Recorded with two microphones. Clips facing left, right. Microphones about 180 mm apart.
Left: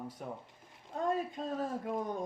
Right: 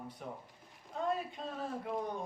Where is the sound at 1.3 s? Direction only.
45° left (ahead or behind).